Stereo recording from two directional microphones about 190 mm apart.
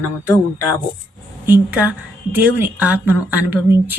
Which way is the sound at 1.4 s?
10° right (ahead or behind).